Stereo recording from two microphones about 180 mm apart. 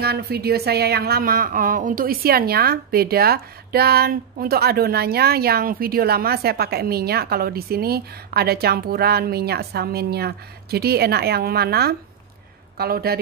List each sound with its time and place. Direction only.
0.0 s speech: 60° right (ahead or behind)